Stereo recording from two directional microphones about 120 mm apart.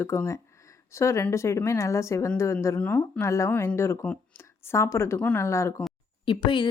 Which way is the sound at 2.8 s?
10° left (ahead or behind).